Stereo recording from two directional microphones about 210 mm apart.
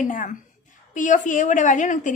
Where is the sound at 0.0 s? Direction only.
40° left (ahead or behind).